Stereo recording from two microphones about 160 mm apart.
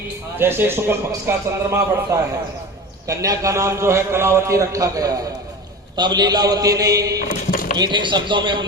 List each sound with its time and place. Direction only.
0.3 s a man's voice: 15° right (ahead or behind)
7.3 s a sound: 55° left (ahead or behind)
7.8 s a man's voice: 30° right (ahead or behind)